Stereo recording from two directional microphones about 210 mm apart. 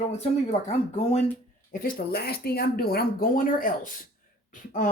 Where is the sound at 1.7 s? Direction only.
40° left (ahead or behind).